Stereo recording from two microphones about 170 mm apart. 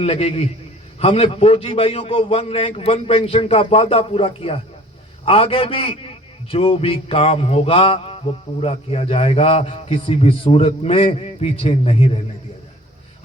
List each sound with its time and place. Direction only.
0.0 s a man's voice: 35° left (ahead or behind)